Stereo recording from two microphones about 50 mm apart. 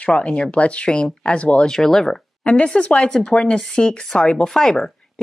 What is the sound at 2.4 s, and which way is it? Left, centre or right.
Speech, left.